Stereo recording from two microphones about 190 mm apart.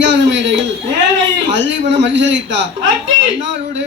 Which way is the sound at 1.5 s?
70° right (ahead or behind).